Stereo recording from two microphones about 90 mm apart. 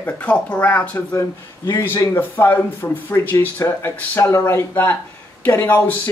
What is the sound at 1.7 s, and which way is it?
Speech, 35° left (ahead or behind).